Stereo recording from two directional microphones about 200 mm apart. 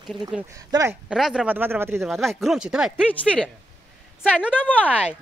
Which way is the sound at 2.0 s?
Centre (ahead or behind).